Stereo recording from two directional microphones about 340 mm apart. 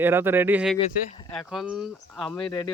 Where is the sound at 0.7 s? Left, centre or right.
Centre.